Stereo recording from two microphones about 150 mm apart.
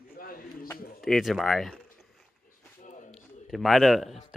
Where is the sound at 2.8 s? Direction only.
55° left (ahead or behind).